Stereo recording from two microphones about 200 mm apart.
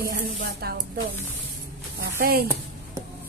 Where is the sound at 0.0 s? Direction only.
50° right (ahead or behind).